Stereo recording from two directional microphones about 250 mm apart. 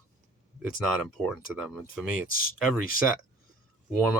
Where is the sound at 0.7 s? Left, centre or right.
Centre.